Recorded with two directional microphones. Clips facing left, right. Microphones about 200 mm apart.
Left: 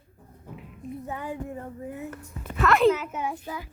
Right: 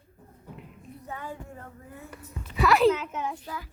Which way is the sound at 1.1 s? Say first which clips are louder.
Left 2 dB; 15° left (ahead or behind).